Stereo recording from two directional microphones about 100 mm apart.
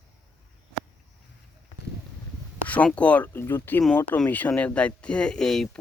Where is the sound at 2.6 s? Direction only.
15° left (ahead or behind).